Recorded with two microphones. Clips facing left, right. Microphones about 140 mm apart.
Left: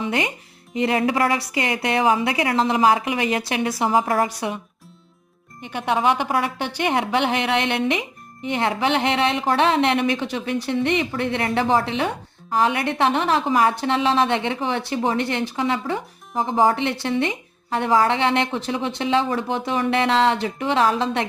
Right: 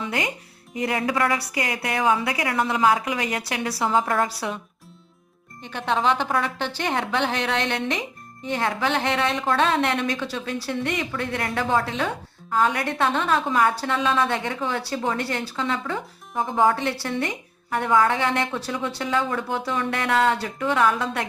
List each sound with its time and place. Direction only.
0.0 s a woman's voice: 20° left (ahead or behind)
5.6 s a woman's voice: 15° left (ahead or behind)